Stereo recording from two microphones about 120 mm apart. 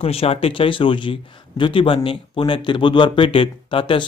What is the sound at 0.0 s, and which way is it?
Speech, 55° left (ahead or behind).